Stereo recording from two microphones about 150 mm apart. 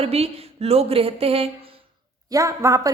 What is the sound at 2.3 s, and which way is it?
Speech, 20° right (ahead or behind).